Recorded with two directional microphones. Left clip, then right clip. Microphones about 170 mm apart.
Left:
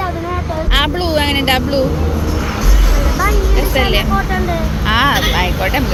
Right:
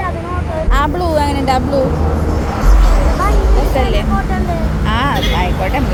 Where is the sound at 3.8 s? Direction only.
Centre (ahead or behind).